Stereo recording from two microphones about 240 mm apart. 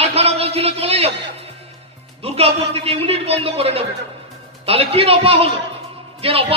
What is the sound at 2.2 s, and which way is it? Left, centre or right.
A man's voice, right.